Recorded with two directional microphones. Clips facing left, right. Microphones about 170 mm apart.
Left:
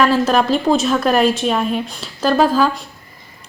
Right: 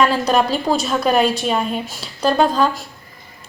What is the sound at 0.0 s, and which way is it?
Speech, centre (ahead or behind).